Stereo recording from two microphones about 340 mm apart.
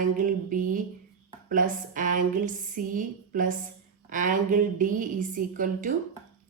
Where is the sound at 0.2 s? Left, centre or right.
Right.